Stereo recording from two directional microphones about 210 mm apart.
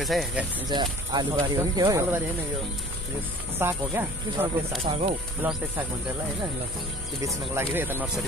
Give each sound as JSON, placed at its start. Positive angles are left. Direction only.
{"t": 0.0, "sound": "speech", "side_deg": 0}
{"t": 0.7, "sound": "speech", "side_deg": -20}
{"t": 3.5, "sound": "speech", "side_deg": -10}
{"t": 4.8, "sound": "speech", "side_deg": -30}
{"t": 5.4, "sound": "speech", "side_deg": -10}
{"t": 7.2, "sound": "speech", "side_deg": -15}